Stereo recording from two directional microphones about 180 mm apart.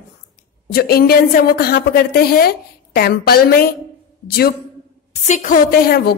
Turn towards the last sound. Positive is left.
turn(degrees=60)  # may be behind; listen again after turning